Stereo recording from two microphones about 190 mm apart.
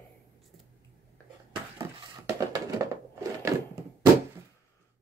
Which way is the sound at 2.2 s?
15° right (ahead or behind).